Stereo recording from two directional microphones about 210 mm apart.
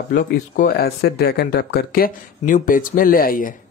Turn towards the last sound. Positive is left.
turn(degrees=40)  # may be behind; listen again after turning